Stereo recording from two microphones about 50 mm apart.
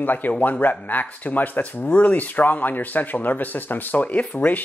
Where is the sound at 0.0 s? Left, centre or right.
Left.